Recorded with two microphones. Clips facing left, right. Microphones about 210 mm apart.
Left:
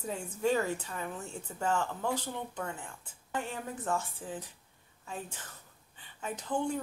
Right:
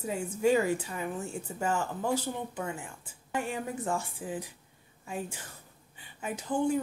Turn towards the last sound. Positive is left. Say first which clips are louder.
# right 4 dB
turn(degrees=-10)  # may be behind; listen again after turning